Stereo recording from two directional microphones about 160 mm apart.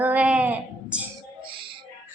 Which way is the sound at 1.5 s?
30° right (ahead or behind).